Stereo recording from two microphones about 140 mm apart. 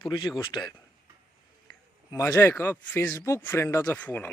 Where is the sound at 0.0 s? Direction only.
30° left (ahead or behind).